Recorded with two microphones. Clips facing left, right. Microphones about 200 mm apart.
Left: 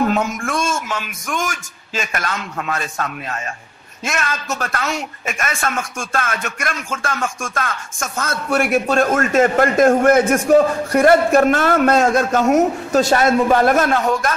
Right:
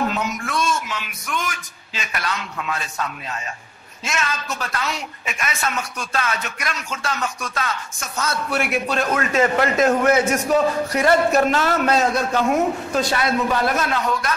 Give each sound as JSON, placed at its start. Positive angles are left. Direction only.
{"t": 0.1, "sound": "speech", "side_deg": 50}